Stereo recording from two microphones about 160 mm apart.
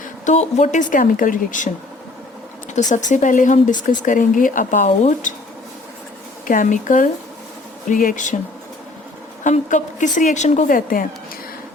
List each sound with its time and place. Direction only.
0.3 s speech: 45° left (ahead or behind)
2.7 s speech: 50° left (ahead or behind)
6.5 s speech: 55° left (ahead or behind)
9.4 s speech: 50° left (ahead or behind)